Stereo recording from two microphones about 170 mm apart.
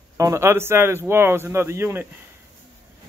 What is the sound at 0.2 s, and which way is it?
Speech, 15° right (ahead or behind).